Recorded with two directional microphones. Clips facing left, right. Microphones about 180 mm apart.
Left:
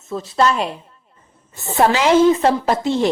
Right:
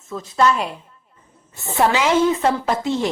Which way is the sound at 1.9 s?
35° left (ahead or behind).